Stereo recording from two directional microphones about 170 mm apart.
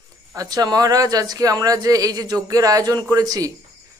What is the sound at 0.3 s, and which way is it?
Speech, 20° right (ahead or behind).